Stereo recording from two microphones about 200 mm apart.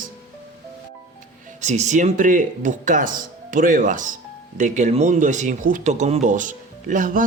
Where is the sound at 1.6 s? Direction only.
35° right (ahead or behind).